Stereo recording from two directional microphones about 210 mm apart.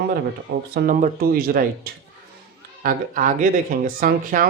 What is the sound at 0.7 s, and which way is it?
Speech, 40° right (ahead or behind).